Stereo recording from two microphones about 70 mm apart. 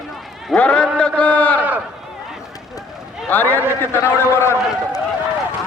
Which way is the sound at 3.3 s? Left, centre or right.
Left.